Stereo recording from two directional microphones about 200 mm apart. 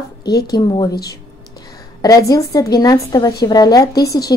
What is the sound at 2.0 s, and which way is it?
A woman's voice, 15° left (ahead or behind).